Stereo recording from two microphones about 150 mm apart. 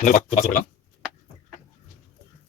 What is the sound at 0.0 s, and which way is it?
Speech, 50° left (ahead or behind).